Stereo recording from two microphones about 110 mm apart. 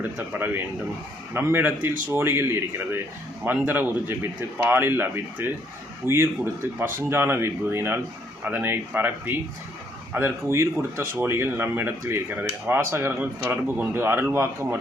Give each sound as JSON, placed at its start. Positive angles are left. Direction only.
{"t": 0.3, "sound": "speech", "side_deg": -15}